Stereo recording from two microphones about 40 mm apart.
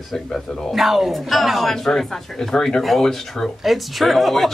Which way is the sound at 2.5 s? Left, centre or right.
Centre.